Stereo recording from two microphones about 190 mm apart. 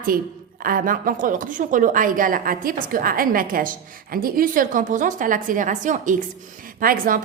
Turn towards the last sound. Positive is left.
turn(degrees=-45)  # may be behind; listen again after turning